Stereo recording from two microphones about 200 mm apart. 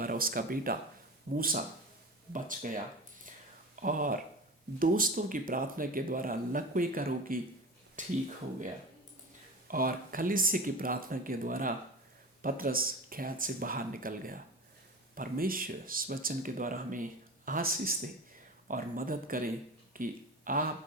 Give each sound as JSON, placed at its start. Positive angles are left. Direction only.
{"t": 0.0, "sound": "speech", "side_deg": -45}
{"t": 9.6, "sound": "speech", "side_deg": -45}
{"t": 19.9, "sound": "a sound", "side_deg": -40}